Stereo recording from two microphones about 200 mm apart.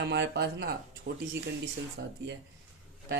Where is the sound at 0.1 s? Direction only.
55° right (ahead or behind).